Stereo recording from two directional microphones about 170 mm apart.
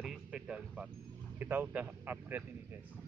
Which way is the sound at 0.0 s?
5° right (ahead or behind).